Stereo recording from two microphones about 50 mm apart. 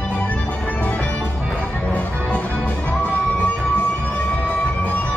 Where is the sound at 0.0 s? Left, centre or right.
Left.